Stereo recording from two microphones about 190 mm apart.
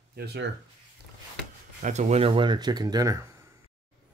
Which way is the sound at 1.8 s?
40° right (ahead or behind).